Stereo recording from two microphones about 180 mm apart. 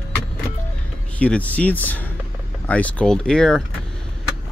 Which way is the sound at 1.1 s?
5° left (ahead or behind).